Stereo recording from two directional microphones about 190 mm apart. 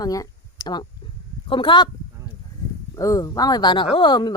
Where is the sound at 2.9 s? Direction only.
15° left (ahead or behind).